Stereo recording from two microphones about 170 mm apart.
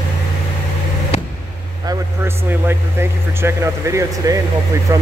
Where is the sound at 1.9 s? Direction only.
15° right (ahead or behind).